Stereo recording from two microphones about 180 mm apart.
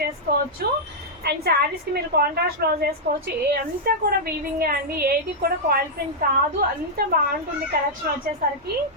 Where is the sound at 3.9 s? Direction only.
55° right (ahead or behind).